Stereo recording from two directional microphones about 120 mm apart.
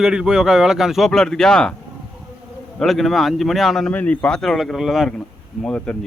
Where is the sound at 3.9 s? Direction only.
10° left (ahead or behind).